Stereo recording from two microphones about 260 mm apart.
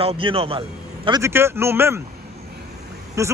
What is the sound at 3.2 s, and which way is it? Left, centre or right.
Speech, centre.